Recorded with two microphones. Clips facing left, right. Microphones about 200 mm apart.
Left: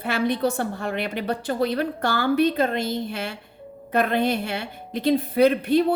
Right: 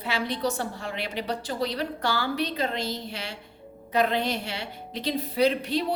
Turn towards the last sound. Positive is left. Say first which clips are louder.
# left 6 dB
turn(degrees=55)  # may be behind; listen again after turning